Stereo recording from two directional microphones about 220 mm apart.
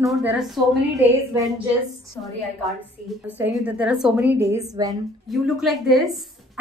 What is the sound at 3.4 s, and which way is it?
A woman's voice, 5° right (ahead or behind).